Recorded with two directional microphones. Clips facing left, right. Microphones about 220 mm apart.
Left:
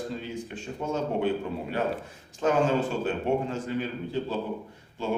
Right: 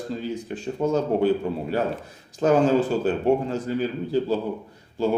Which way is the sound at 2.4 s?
40° right (ahead or behind).